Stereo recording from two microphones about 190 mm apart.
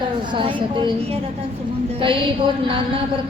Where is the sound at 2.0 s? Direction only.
25° right (ahead or behind).